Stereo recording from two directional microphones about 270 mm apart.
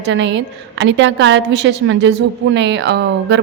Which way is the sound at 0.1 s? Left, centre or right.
Right.